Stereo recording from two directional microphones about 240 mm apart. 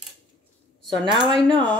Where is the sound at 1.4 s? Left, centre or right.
Right.